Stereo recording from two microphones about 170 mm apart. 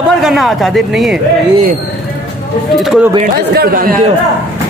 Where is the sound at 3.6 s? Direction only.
60° right (ahead or behind).